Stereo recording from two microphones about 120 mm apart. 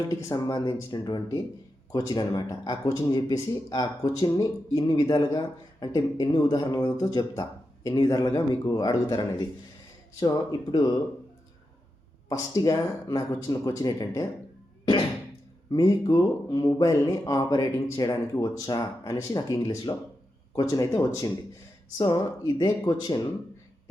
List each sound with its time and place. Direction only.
0.1 s speech: 30° left (ahead or behind)
12.3 s speech: 30° left (ahead or behind)
15.7 s speech: 30° left (ahead or behind)
21.9 s speech: 35° left (ahead or behind)